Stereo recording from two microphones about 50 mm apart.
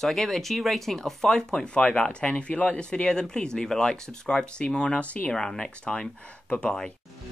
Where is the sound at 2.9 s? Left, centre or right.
Centre.